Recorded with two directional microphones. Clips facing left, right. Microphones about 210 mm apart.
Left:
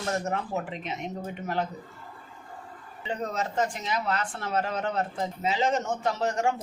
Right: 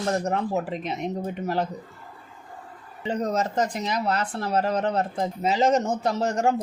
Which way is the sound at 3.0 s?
40° right (ahead or behind).